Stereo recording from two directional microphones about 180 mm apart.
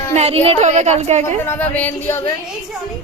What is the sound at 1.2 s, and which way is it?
Speech, 15° left (ahead or behind).